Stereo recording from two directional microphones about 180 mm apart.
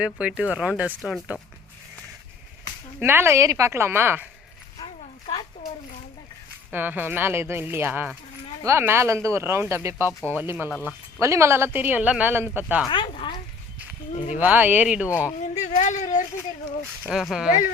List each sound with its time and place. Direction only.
0.0 s speech: 5° right (ahead or behind)
3.0 s speech: 10° right (ahead or behind)
6.7 s speech: 10° right (ahead or behind)
12.9 s a sound: 30° left (ahead or behind)
14.3 s speech: 10° right (ahead or behind)
15.4 s a sound: 40° left (ahead or behind)
17.1 s speech: 5° right (ahead or behind)